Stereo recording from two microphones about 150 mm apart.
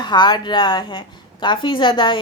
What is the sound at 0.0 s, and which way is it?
A woman's voice, 30° left (ahead or behind).